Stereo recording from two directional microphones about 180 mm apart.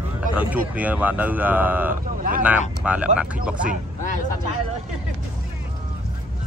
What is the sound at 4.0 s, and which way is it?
Speech, 45° left (ahead or behind).